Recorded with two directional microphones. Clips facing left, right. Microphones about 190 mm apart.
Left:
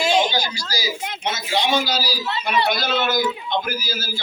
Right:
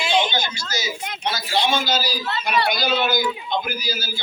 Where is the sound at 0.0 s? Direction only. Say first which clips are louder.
Left 2 dB; 40° left (ahead or behind).